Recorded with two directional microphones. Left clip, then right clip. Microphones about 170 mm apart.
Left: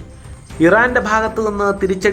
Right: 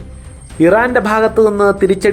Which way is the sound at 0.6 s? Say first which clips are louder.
Right 2 dB; 20° right (ahead or behind).